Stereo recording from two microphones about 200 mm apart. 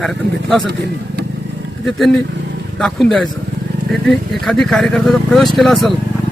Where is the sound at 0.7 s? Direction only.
55° right (ahead or behind).